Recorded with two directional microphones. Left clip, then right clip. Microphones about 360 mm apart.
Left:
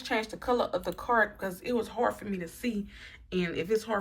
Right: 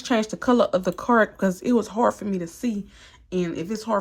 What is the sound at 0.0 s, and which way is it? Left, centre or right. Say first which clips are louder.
Speech: right 8 dB; centre.